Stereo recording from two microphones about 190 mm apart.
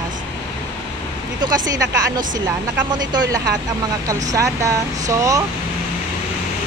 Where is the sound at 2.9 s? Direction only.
20° right (ahead or behind).